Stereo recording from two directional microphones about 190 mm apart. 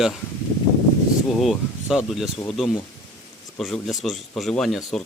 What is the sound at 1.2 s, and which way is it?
Speech, centre (ahead or behind).